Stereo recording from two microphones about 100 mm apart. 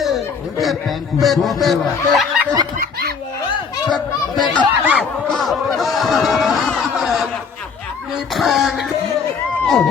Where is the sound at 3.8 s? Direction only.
45° left (ahead or behind).